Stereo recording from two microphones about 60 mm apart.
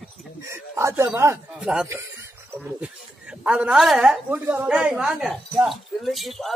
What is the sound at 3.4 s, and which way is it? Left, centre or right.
Speech, centre.